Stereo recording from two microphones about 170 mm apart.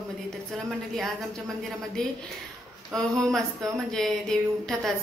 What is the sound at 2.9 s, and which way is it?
A woman's voice, 5° left (ahead or behind).